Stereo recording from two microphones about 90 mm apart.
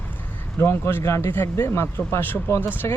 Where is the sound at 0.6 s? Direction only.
25° left (ahead or behind).